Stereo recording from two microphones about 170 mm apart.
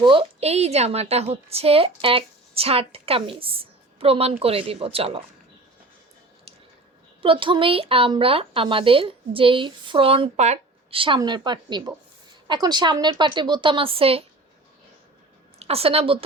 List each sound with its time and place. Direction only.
0.0 s a woman's voice: 30° right (ahead or behind)
7.2 s a woman's voice: 30° right (ahead or behind)
15.5 s a woman's voice: 35° right (ahead or behind)